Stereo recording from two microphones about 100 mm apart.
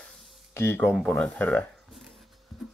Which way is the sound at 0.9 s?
10° left (ahead or behind).